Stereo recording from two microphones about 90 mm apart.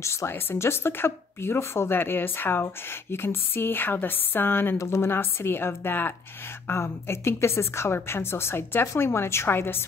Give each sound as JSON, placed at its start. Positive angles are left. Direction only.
{"t": 0.0, "sound": "speech", "side_deg": 30}